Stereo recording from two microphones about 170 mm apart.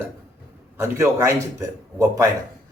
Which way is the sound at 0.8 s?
15° right (ahead or behind).